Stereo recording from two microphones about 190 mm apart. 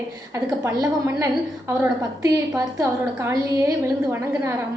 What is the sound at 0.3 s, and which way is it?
A woman's voice, 15° right (ahead or behind).